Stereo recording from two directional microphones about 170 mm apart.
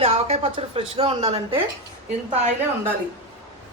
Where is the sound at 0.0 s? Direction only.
40° right (ahead or behind).